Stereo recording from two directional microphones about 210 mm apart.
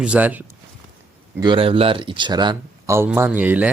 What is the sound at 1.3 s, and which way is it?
Speech, 20° right (ahead or behind).